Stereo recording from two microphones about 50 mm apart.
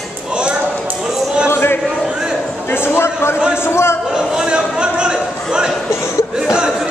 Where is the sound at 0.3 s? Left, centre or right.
Centre.